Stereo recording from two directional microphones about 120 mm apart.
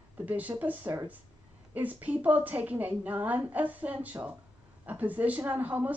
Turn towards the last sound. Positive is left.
turn(degrees=-15)  # may be behind; listen again after turning